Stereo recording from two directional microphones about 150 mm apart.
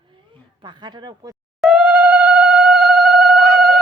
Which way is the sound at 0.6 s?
30° right (ahead or behind).